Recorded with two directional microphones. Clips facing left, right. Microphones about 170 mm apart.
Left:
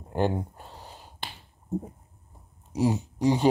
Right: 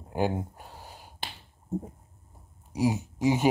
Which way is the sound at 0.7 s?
10° right (ahead or behind).